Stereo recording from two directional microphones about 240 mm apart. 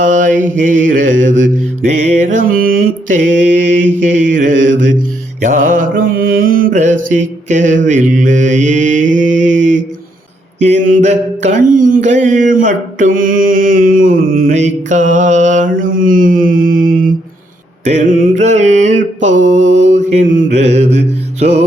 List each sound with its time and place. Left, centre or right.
0.0 s mantra: right